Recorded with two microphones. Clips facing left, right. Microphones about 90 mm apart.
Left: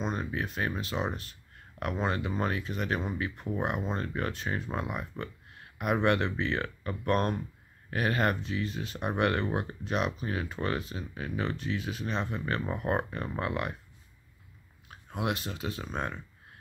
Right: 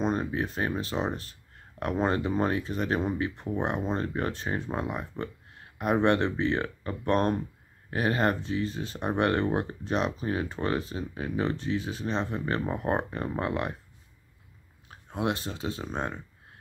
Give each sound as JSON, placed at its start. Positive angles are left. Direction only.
{"t": 0.0, "sound": "speech", "side_deg": -35}
{"t": 14.9, "sound": "speech", "side_deg": -25}